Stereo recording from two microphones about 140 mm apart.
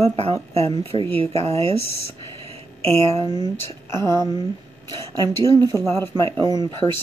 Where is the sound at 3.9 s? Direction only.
30° right (ahead or behind).